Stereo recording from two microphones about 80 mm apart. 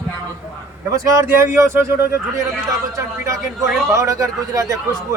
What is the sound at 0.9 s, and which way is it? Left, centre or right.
A man's voice, right.